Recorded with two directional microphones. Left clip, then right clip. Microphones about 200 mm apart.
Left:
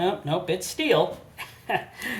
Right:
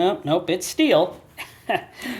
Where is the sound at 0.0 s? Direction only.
40° right (ahead or behind).